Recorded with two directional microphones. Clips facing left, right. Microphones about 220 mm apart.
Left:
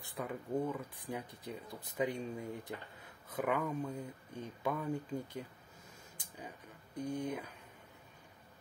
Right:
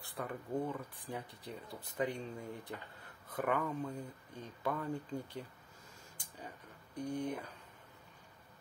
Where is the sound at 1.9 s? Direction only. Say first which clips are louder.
Left 1 dB; 15° left (ahead or behind).